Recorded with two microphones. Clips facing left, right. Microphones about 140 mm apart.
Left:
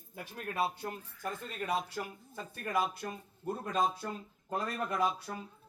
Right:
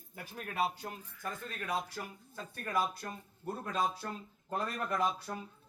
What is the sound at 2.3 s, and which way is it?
Speech, 10° left (ahead or behind).